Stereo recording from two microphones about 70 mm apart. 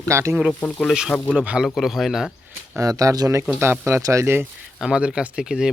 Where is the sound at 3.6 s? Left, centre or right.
Right.